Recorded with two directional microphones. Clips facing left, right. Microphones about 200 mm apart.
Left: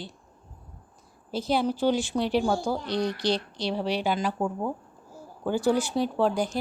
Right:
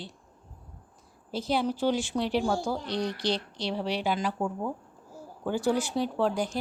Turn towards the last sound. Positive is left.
turn(degrees=40)  # may be behind; listen again after turning